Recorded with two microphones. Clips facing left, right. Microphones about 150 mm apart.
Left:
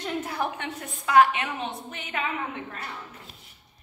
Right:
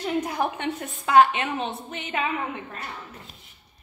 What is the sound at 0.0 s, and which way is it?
A woman's voice, 15° right (ahead or behind).